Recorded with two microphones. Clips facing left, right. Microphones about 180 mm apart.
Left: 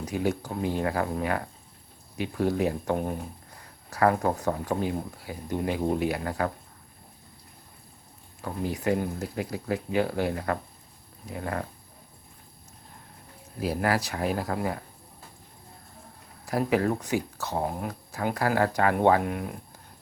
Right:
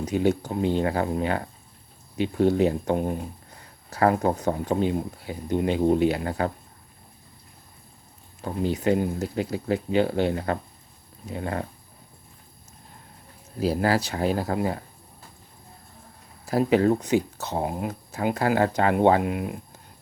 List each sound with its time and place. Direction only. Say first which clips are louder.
0.0 s speech: right 5 dB; 20° right (ahead or behind)
8.4 s speech: right 5 dB; 25° right (ahead or behind)
13.6 s speech: right 4 dB; 30° right (ahead or behind)
16.5 s speech: right 5 dB; 25° right (ahead or behind)